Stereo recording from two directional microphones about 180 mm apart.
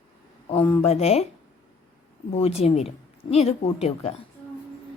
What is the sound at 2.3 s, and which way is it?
A woman's voice, 35° left (ahead or behind).